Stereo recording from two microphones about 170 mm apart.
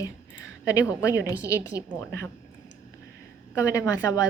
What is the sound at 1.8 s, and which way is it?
Speech, 15° left (ahead or behind).